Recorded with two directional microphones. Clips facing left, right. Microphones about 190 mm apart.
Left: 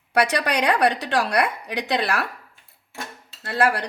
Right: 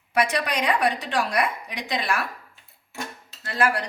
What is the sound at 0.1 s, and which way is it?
A woman's voice, 70° left (ahead or behind).